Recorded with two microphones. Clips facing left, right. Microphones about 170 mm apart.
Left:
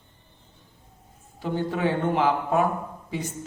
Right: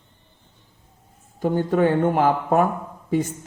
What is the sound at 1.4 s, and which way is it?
A man's voice, 45° right (ahead or behind).